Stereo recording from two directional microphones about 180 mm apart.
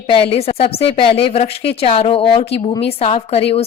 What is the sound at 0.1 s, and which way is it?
A woman's voice, 30° left (ahead or behind).